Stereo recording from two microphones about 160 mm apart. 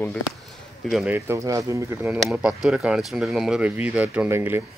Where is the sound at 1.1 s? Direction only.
15° right (ahead or behind).